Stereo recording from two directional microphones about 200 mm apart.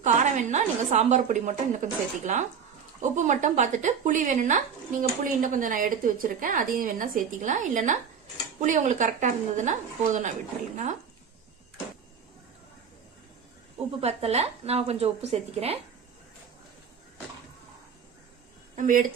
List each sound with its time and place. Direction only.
0.0 s speech: 35° right (ahead or behind)
14.0 s speech: 30° right (ahead or behind)
18.8 s speech: 40° right (ahead or behind)